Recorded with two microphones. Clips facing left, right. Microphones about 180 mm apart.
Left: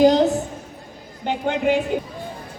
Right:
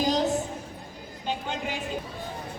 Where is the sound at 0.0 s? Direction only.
60° left (ahead or behind).